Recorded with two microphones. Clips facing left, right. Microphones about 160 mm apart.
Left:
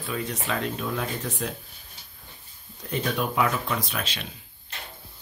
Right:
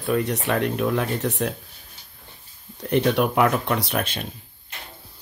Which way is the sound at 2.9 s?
65° right (ahead or behind).